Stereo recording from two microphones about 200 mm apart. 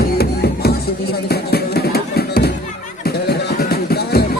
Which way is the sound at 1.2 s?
50° left (ahead or behind).